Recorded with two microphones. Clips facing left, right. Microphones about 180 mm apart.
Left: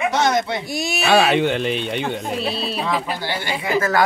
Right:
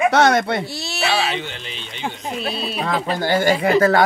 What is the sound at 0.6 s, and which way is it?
Speech, 15° left (ahead or behind).